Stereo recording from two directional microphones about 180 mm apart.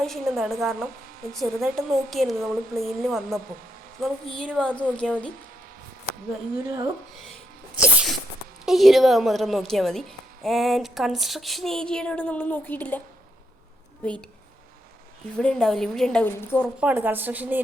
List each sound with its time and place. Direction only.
0.0 s a woman's voice: centre (ahead or behind)
6.7 s a woman's voice: 20° right (ahead or behind)
7.8 s a sound: 5° right (ahead or behind)
8.6 s a woman's voice: centre (ahead or behind)
14.0 s a woman's voice: 5° left (ahead or behind)
15.4 s a woman's voice: 5° left (ahead or behind)
16.8 s a woman's voice: 10° right (ahead or behind)